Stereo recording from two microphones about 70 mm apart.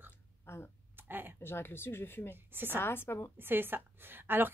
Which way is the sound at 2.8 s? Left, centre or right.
Left.